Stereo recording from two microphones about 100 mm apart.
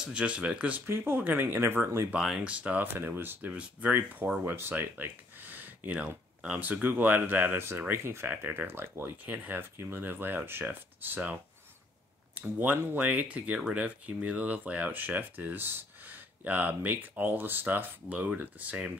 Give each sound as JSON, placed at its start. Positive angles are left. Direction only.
{"t": 0.0, "sound": "speech", "side_deg": -10}
{"t": 2.1, "sound": "speech", "side_deg": -5}
{"t": 12.4, "sound": "speech", "side_deg": -15}